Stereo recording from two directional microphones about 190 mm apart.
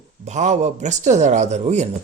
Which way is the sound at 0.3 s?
35° right (ahead or behind).